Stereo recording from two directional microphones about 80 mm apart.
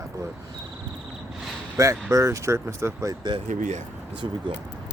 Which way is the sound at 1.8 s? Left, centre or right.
Right.